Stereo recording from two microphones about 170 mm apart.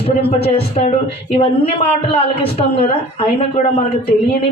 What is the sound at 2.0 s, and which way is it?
Speech, 35° left (ahead or behind).